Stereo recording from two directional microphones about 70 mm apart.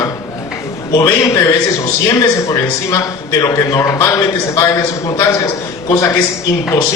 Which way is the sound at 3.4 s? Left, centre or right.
Left.